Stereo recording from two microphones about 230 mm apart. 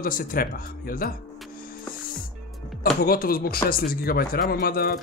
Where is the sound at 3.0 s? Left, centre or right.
Left.